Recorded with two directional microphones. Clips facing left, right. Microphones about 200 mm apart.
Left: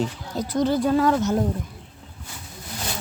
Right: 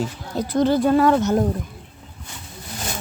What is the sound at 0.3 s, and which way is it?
Speech, 60° right (ahead or behind).